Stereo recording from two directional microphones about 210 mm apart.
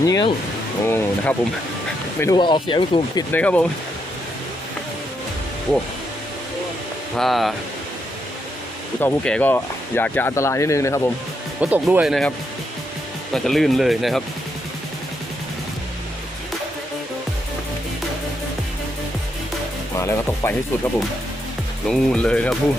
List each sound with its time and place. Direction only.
0.0 s speech: 15° left (ahead or behind)
3.3 s speech: 5° left (ahead or behind)
7.2 s speech: centre (ahead or behind)
9.0 s speech: 5° left (ahead or behind)
11.6 s speech: 5° right (ahead or behind)
13.3 s speech: centre (ahead or behind)
20.0 s speech: 10° left (ahead or behind)
21.8 s speech: 5° left (ahead or behind)